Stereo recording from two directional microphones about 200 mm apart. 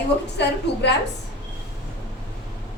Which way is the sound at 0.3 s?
60° left (ahead or behind).